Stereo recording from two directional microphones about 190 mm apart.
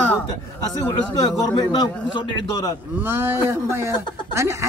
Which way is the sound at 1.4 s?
20° left (ahead or behind).